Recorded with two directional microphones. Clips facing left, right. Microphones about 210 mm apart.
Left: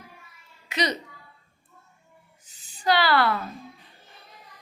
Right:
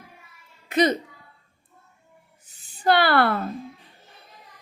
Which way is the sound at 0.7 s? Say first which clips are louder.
Right 7 dB; 50° right (ahead or behind).